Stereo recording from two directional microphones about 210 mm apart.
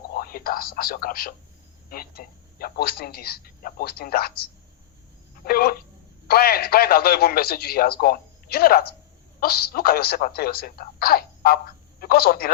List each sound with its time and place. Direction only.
0.1 s speech: 45° left (ahead or behind)
5.5 s a woman's voice: 45° left (ahead or behind)